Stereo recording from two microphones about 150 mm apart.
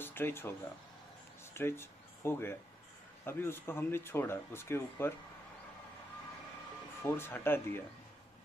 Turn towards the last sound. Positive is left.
turn(degrees=15)  # may be behind; listen again after turning